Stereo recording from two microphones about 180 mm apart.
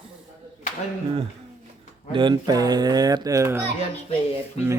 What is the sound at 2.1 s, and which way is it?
Speech, 25° right (ahead or behind).